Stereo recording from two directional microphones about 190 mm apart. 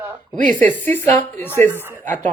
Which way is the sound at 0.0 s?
10° right (ahead or behind).